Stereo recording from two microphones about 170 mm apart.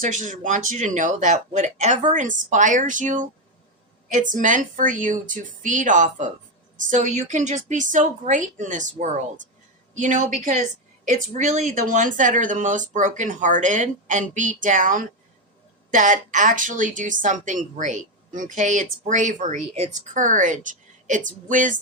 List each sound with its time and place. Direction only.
0.0 s speech: 50° right (ahead or behind)